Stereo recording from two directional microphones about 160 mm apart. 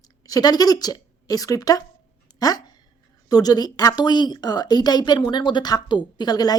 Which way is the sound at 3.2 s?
25° left (ahead or behind).